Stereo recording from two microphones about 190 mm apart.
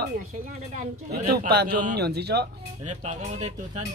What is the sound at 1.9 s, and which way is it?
Speech, 60° right (ahead or behind).